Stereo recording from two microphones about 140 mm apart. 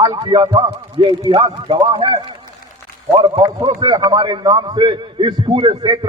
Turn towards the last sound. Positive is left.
turn(degrees=-35)  # may be behind; listen again after turning